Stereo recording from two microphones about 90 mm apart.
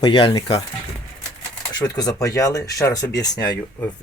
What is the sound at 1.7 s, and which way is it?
Speech, 45° left (ahead or behind).